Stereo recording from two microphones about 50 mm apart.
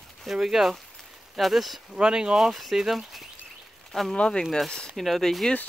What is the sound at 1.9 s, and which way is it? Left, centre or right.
Speech, centre.